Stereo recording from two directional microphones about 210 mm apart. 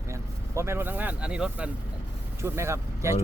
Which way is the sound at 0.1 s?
15° right (ahead or behind).